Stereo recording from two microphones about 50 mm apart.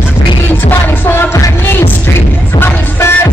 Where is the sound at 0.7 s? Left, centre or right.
Left.